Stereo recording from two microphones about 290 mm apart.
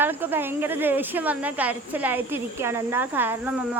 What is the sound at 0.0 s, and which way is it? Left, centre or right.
Speech, centre.